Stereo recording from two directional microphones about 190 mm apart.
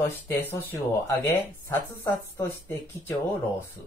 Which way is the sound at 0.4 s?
10° left (ahead or behind).